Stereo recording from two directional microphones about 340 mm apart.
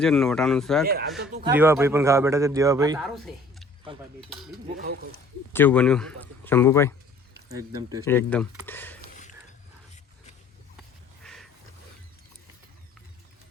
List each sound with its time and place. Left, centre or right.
0.0 s speech: centre
1.2 s speech: right
1.5 s a man's voice: centre
3.0 s a man's voice: centre
3.9 s a man's voice: centre
5.5 s speech: centre
7.4 s speech: centre
8.0 s speech: centre
11.2 s a sound: centre